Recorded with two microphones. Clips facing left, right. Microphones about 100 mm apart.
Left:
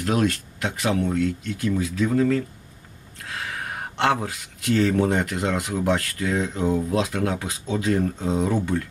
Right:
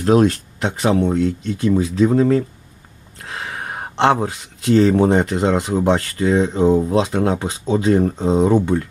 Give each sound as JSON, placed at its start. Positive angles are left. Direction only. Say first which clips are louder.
{"t": 0.0, "sound": "speech", "louder": "right 8 dB", "side_deg": -30}